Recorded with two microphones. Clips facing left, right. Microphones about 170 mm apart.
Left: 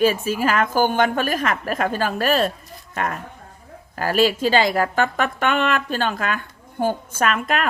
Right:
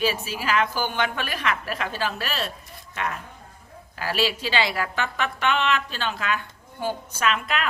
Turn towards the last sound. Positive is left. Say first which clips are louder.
# left 4 dB
turn(degrees=50)  # may be behind; listen again after turning